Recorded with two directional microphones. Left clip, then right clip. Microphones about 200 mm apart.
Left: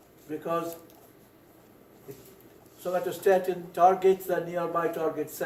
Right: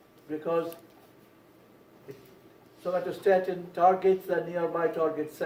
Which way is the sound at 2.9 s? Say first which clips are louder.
Left 1 dB; 45° left (ahead or behind).